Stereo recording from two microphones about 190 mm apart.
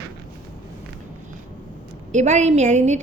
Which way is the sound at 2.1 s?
35° right (ahead or behind).